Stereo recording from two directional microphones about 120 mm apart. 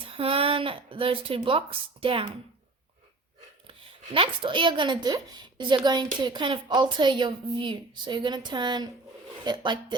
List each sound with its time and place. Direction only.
0.0 s speech: 50° right (ahead or behind)
3.7 s a woman's voice: 50° right (ahead or behind)